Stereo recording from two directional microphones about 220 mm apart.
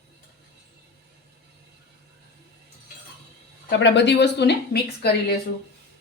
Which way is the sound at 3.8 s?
50° left (ahead or behind).